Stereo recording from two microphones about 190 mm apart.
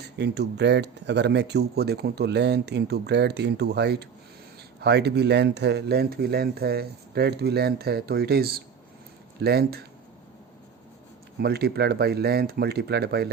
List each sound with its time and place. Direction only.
0.0 s speech: 60° right (ahead or behind)
11.3 s speech: 55° right (ahead or behind)